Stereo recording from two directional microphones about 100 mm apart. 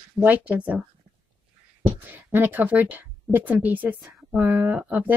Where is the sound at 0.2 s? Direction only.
15° right (ahead or behind).